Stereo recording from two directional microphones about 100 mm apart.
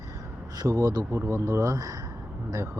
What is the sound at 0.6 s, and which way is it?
Speech, 40° right (ahead or behind).